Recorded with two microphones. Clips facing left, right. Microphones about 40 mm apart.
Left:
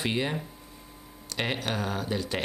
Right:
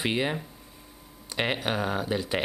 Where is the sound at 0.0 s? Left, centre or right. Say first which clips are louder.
Right 2 dB; centre.